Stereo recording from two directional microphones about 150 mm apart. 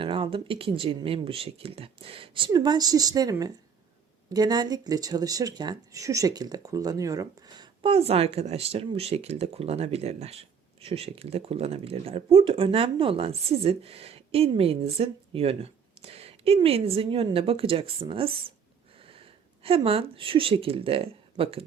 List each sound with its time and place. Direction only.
0.0 s speech: 35° right (ahead or behind)